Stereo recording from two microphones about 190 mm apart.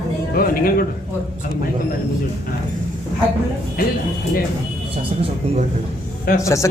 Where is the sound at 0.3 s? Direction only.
50° left (ahead or behind).